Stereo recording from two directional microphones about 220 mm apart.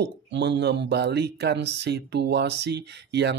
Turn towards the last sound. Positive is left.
turn(degrees=-50)  # may be behind; listen again after turning